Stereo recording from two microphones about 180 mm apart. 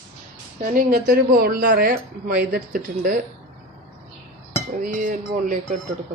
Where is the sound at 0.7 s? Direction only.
55° right (ahead or behind).